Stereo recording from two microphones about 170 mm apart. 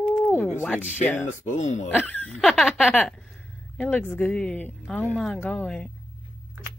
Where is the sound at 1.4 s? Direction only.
45° left (ahead or behind).